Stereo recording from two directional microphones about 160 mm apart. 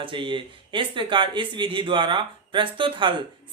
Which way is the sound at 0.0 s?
30° right (ahead or behind).